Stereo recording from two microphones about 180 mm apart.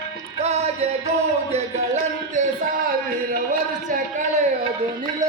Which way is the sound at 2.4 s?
45° right (ahead or behind).